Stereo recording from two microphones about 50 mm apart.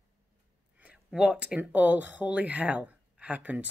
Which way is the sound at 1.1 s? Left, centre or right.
Centre.